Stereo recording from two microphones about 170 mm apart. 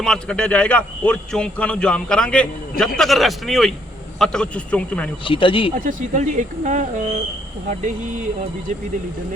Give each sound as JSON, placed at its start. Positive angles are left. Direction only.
{"t": 0.0, "sound": "a man's voice", "side_deg": 5}
{"t": 5.2, "sound": "speech", "side_deg": 30}
{"t": 5.7, "sound": "speech", "side_deg": -50}